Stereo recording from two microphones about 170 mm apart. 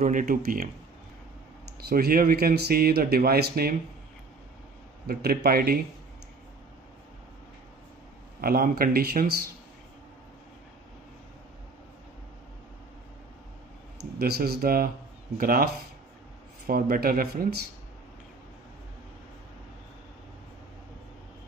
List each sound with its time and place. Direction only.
0.0 s speech: 45° right (ahead or behind)
1.9 s speech: 65° right (ahead or behind)
5.0 s speech: 65° right (ahead or behind)
8.4 s speech: 60° right (ahead or behind)
14.1 s speech: 65° right (ahead or behind)